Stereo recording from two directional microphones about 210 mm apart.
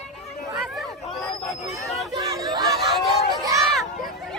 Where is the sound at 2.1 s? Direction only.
20° right (ahead or behind).